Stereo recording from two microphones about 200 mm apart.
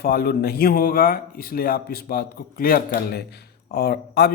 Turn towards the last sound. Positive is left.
turn(degrees=50)  # may be behind; listen again after turning